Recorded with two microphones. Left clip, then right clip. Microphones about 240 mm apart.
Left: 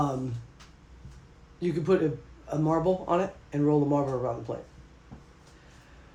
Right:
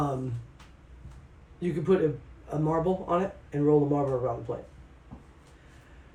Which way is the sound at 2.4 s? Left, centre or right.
Left.